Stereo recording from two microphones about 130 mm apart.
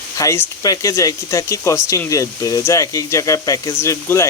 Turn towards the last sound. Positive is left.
turn(degrees=20)  # may be behind; listen again after turning